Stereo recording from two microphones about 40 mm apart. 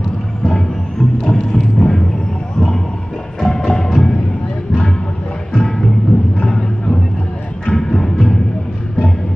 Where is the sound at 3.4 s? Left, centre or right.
Centre.